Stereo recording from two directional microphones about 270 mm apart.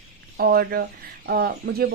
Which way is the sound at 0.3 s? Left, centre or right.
Right.